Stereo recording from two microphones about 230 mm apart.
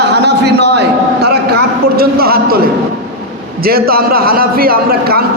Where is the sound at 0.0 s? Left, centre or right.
Right.